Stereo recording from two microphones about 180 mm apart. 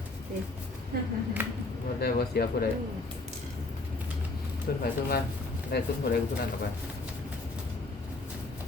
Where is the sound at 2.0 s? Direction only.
60° left (ahead or behind).